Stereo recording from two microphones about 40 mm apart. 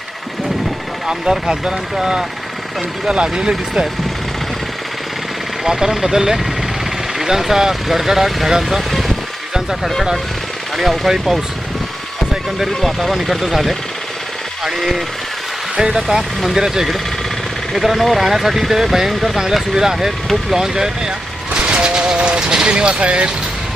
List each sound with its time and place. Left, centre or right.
1.0 s speech: centre
5.6 s speech: centre
8.9 s speech: centre
10.8 s speech: centre
17.7 s speech: centre
21.5 s speech: right